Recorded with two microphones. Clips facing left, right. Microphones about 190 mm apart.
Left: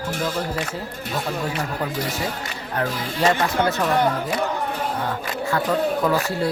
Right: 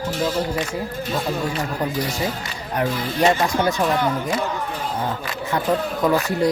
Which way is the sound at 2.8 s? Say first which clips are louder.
Right 3 dB; 15° right (ahead or behind).